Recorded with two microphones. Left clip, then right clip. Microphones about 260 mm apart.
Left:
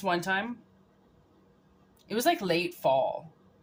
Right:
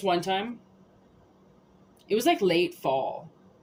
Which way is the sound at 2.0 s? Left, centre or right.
Left.